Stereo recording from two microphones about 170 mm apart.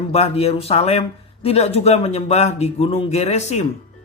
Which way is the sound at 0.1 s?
35° left (ahead or behind).